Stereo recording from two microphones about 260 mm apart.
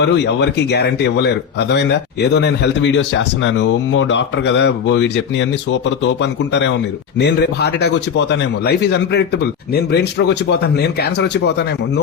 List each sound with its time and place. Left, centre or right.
0.0 s a man's voice: left